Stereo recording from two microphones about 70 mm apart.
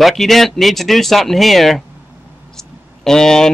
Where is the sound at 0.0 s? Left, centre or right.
Centre.